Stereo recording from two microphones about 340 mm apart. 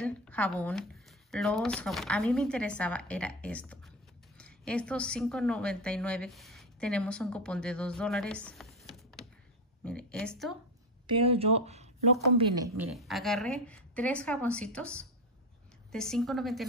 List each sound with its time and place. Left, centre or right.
0.0 s a woman's voice: centre
11.1 s a woman's voice: centre